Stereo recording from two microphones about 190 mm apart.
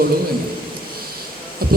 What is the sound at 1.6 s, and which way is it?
Heart sounds, 50° right (ahead or behind).